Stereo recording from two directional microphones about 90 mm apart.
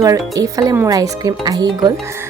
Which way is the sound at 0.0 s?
40° right (ahead or behind).